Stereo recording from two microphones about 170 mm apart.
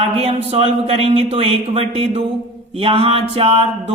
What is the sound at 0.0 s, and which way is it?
Speech, 35° right (ahead or behind).